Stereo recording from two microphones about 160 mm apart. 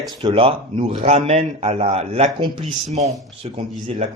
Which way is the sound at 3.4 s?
40° right (ahead or behind).